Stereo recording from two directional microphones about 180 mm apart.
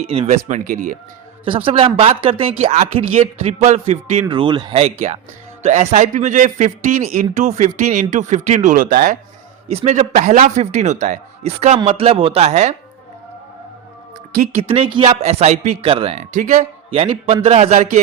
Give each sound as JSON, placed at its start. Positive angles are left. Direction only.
{"t": 0.0, "sound": "speech", "side_deg": -35}
{"t": 1.5, "sound": "a man's voice", "side_deg": -30}
{"t": 9.6, "sound": "a man's voice", "side_deg": -35}
{"t": 14.3, "sound": "speech", "side_deg": -50}
{"t": 14.7, "sound": "a man's voice", "side_deg": -30}